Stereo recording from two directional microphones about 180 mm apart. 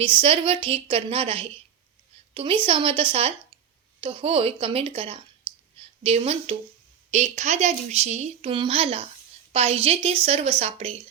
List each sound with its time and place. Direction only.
0.0 s a woman's voice: 30° right (ahead or behind)